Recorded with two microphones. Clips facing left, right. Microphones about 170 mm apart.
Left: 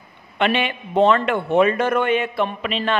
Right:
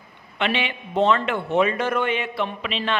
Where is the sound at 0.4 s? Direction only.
50° left (ahead or behind).